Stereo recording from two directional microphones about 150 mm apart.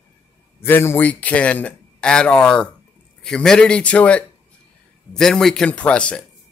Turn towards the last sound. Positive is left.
turn(degrees=5)  # may be behind; listen again after turning